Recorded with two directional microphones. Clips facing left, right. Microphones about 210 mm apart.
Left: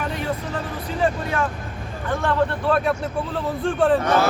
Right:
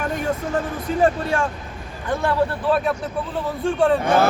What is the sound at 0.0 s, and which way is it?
Vehicle, 45° right (ahead or behind).